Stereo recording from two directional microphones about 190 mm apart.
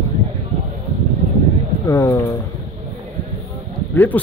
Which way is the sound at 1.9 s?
15° left (ahead or behind).